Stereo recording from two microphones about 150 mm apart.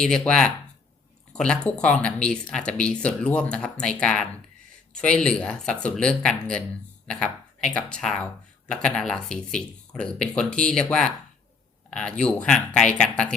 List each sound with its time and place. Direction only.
0.0 s speech: 5° left (ahead or behind)